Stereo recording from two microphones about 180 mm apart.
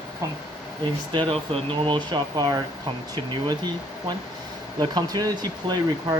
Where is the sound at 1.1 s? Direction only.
30° right (ahead or behind).